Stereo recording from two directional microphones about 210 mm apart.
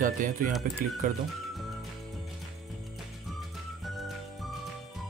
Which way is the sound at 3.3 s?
Centre (ahead or behind).